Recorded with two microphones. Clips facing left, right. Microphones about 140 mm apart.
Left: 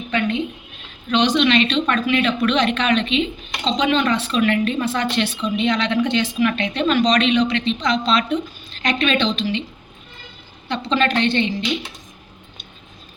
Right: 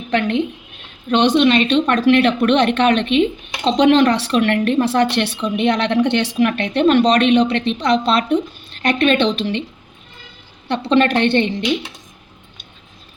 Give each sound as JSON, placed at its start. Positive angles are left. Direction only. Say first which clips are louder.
{"t": 0.2, "sound": "speech", "louder": "right 3 dB", "side_deg": -65}
{"t": 2.0, "sound": "speech", "louder": "right 5 dB", "side_deg": -70}
{"t": 10.7, "sound": "speech", "louder": "right 5 dB", "side_deg": -60}